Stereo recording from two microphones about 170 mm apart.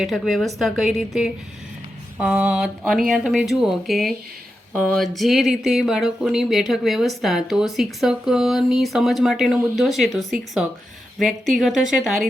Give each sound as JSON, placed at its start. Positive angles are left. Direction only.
{"t": 0.0, "sound": "speech", "side_deg": 0}